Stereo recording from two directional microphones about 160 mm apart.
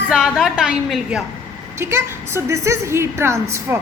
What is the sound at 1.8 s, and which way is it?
A woman's voice, 15° right (ahead or behind).